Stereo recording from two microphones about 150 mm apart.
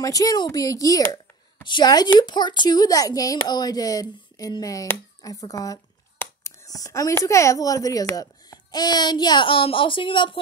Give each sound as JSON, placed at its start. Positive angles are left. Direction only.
{"t": 0.0, "sound": "a woman's voice", "side_deg": 25}